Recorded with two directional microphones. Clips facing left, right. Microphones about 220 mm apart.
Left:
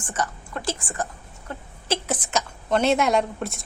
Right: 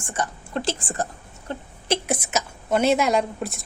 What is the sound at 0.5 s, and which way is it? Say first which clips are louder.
Speech: right 5 dB; 30° right (ahead or behind).